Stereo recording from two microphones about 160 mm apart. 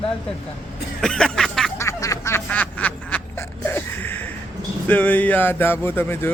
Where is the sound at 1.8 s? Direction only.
20° left (ahead or behind).